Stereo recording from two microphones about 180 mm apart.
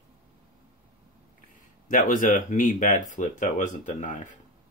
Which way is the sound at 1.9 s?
50° left (ahead or behind).